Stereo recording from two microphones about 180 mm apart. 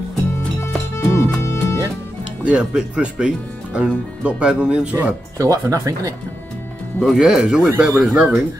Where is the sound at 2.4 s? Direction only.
5° right (ahead or behind).